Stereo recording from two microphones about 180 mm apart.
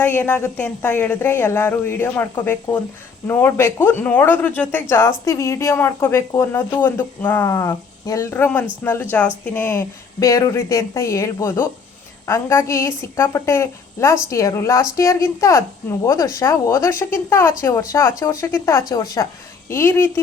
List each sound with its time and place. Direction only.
0.0 s speech: 10° left (ahead or behind)